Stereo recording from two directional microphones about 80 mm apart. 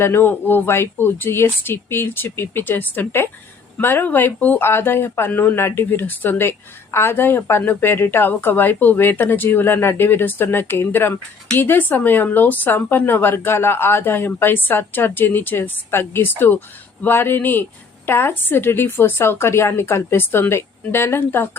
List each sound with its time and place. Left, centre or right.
0.0 s speech: left